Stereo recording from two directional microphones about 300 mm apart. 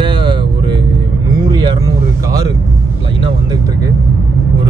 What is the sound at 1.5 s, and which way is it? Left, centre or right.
Vehicle, centre.